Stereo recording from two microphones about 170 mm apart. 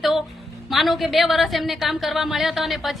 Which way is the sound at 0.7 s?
Centre (ahead or behind).